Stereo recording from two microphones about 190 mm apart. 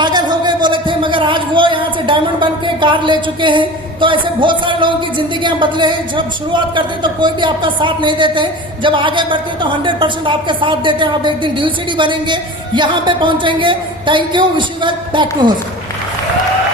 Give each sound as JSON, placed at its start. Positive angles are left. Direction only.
{"t": 0.0, "sound": "speech", "side_deg": -20}